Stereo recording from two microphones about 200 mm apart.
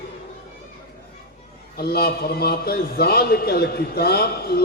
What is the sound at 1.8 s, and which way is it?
A man's voice, 50° left (ahead or behind).